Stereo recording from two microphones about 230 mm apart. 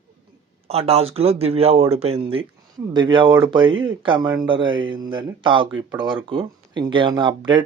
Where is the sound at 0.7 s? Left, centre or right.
Right.